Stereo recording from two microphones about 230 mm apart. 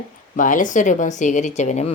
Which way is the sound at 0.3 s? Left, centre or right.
Left.